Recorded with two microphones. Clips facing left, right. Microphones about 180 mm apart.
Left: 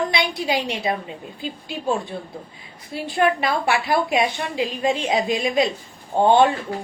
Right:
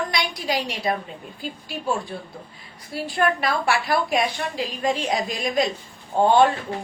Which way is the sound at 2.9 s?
25° left (ahead or behind).